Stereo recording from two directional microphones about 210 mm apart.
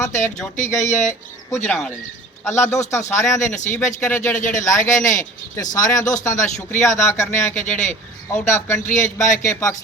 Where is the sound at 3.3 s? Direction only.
35° left (ahead or behind).